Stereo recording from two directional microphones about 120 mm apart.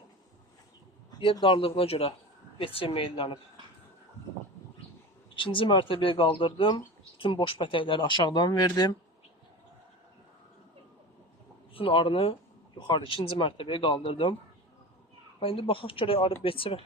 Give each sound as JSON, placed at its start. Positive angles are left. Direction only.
{"t": 1.2, "sound": "speech", "side_deg": 40}
{"t": 5.4, "sound": "speech", "side_deg": 45}
{"t": 11.7, "sound": "speech", "side_deg": 50}
{"t": 15.4, "sound": "speech", "side_deg": 50}